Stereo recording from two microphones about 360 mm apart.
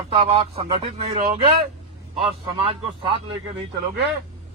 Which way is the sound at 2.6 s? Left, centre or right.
Centre.